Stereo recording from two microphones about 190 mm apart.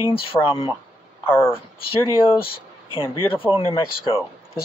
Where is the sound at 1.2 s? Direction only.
10° left (ahead or behind).